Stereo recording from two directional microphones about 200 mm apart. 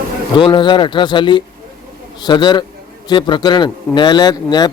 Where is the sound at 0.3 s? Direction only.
25° left (ahead or behind).